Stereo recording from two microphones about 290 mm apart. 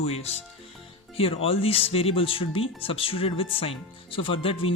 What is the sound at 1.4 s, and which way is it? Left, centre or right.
Speech, centre.